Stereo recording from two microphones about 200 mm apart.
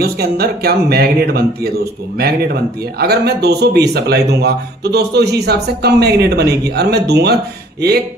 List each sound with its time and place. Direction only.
0.0 s speech: 50° right (ahead or behind)